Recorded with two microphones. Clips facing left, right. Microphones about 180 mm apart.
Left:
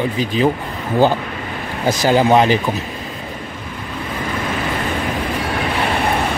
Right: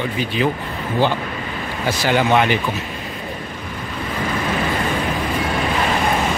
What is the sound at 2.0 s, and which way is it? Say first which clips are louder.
Speech: left 4 dB; 35° left (ahead or behind).